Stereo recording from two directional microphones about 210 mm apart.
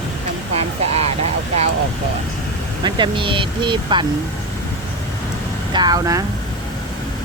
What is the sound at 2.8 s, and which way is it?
Speech, 20° right (ahead or behind).